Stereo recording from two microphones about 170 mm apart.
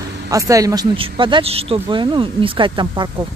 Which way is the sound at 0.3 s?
20° right (ahead or behind).